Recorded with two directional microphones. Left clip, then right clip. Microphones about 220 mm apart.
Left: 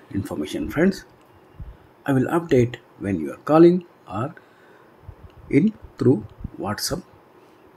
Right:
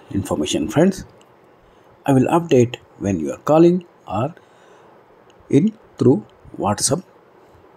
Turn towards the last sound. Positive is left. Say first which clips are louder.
# right 7 dB
turn(degrees=-15)  # may be behind; listen again after turning